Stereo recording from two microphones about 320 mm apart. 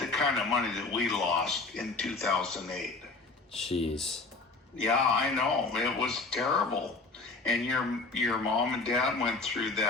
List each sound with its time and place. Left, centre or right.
0.0 s a man's voice: centre
3.7 s speech: centre
3.9 s a man's voice: centre